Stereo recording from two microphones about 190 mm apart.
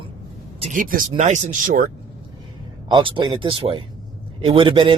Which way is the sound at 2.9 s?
25° right (ahead or behind).